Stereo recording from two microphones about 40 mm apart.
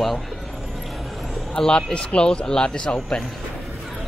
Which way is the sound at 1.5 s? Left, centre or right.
Left.